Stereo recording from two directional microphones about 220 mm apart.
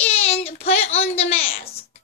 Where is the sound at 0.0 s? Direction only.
30° left (ahead or behind).